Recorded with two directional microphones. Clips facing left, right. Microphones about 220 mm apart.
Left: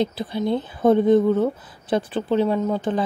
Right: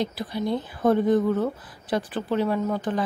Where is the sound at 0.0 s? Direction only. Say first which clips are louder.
Left 4 dB; 25° left (ahead or behind).